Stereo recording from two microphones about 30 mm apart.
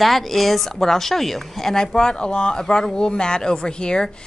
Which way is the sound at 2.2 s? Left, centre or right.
Left.